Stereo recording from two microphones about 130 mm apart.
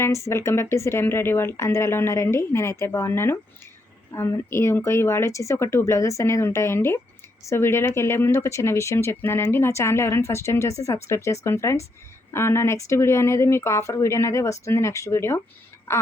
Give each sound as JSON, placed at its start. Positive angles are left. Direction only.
{"t": 0.3, "sound": "a woman's voice", "side_deg": 20}